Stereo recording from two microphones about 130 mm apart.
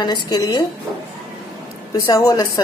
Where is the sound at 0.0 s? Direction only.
35° left (ahead or behind).